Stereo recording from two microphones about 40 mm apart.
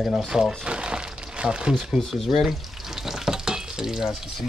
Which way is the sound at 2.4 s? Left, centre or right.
Centre.